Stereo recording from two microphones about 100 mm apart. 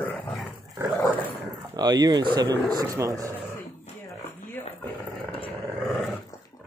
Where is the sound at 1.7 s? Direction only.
40° right (ahead or behind).